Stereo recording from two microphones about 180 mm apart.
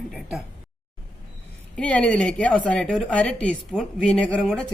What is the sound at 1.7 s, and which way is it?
A woman's voice, 5° left (ahead or behind).